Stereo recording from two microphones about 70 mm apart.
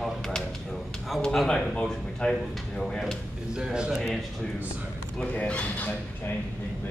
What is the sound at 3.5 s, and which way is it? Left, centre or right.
Speech, centre.